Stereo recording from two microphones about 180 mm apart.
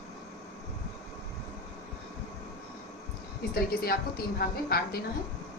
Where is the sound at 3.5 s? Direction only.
55° left (ahead or behind).